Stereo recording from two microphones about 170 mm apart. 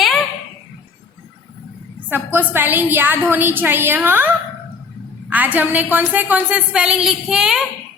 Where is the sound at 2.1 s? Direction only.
10° right (ahead or behind).